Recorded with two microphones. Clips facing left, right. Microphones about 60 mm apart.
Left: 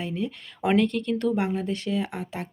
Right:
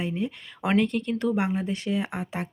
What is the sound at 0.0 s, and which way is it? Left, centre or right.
Speech, centre.